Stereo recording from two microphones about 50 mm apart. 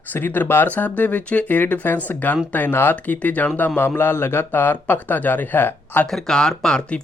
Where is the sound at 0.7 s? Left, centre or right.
Left.